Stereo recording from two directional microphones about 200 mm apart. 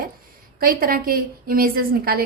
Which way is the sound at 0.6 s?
45° right (ahead or behind).